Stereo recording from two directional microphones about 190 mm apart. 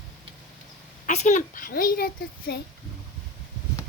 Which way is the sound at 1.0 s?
40° left (ahead or behind).